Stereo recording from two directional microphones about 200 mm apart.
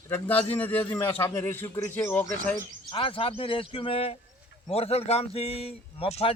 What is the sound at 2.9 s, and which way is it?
A man's voice, 25° left (ahead or behind).